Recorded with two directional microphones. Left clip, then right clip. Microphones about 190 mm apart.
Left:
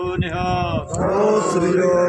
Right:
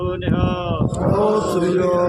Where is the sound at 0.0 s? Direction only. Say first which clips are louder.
Even; 60° left (ahead or behind).